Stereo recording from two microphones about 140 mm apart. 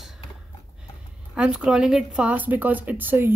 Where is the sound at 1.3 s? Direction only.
5° right (ahead or behind).